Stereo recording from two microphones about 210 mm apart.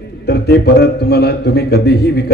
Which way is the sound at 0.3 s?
50° left (ahead or behind).